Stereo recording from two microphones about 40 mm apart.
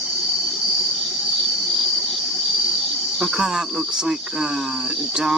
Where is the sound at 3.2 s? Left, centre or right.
Centre.